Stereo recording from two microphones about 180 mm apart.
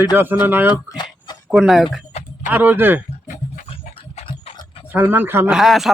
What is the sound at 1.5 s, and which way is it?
Speech, centre (ahead or behind).